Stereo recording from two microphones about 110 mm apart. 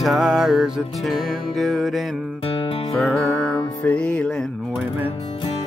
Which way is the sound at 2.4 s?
55° left (ahead or behind).